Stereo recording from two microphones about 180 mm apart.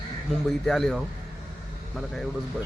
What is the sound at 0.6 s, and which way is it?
Speech, centre (ahead or behind).